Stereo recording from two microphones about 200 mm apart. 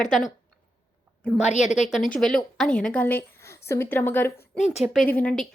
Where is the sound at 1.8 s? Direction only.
Centre (ahead or behind).